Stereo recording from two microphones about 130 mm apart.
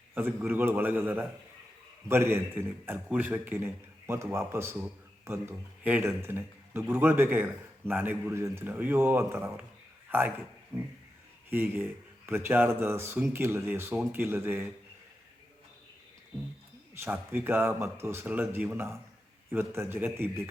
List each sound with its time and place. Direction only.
0.1 s a man's voice: 15° right (ahead or behind)
10.7 s a sound: 20° right (ahead or behind)
11.5 s a man's voice: 15° right (ahead or behind)
16.9 s a man's voice: 15° right (ahead or behind)